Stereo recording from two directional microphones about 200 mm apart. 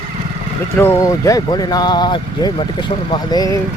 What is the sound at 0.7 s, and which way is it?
Speech, 10° left (ahead or behind).